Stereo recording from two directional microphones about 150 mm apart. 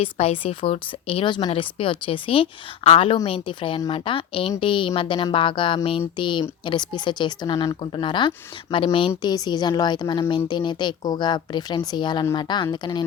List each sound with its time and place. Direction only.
0.0 s a woman's voice: 40° left (ahead or behind)